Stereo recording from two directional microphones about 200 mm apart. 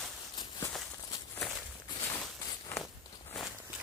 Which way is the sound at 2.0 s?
15° left (ahead or behind).